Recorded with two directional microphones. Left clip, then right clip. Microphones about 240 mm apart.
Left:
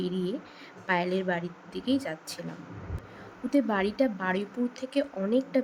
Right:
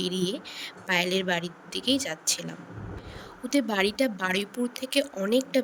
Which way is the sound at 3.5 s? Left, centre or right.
Right.